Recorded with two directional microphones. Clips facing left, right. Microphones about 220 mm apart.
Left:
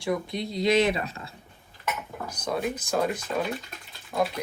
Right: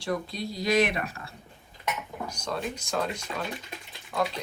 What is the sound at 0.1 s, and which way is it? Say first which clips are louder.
Speech: left 3 dB; 20° left (ahead or behind).